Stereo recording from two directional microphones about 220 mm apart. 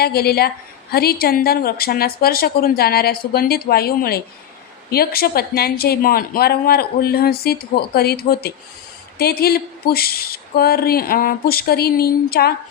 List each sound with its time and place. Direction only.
0.0 s speech: 45° left (ahead or behind)